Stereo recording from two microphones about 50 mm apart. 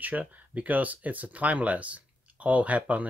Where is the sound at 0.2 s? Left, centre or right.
Right.